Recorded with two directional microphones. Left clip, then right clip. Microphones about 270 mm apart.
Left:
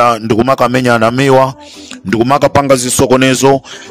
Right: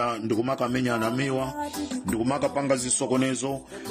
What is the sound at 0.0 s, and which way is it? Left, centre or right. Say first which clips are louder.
Speech: left 17 dB; left.